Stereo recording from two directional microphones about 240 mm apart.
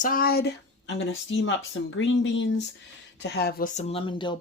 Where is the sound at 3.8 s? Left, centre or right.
Left.